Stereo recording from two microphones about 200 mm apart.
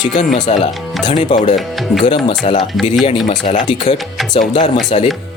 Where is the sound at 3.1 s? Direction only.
35° left (ahead or behind).